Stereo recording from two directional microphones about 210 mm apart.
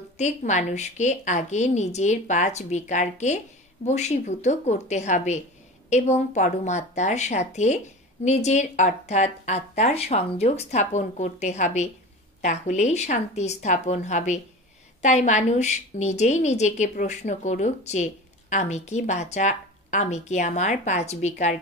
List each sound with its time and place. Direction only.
0.2 s a woman's voice: 35° left (ahead or behind)